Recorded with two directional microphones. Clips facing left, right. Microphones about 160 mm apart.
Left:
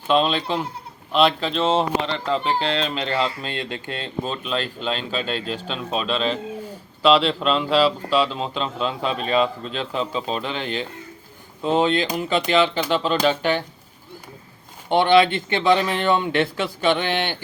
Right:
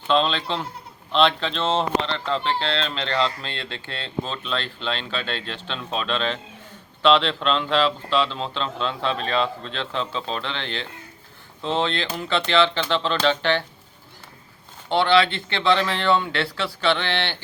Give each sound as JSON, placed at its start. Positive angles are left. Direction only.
{"t": 0.1, "sound": "speech", "side_deg": 10}
{"t": 14.8, "sound": "speech", "side_deg": 15}